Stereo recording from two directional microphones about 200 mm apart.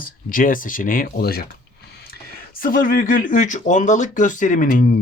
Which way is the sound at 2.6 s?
45° left (ahead or behind).